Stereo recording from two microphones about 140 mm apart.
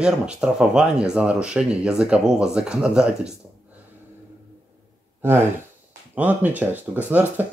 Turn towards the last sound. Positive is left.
turn(degrees=-10)  # may be behind; listen again after turning